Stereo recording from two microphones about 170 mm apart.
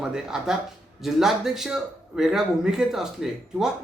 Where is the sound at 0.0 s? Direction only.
5° right (ahead or behind).